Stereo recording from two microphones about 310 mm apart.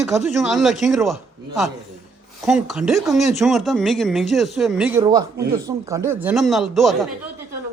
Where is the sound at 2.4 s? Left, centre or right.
Centre.